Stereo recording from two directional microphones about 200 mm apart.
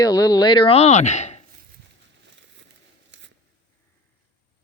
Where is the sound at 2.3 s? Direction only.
65° right (ahead or behind).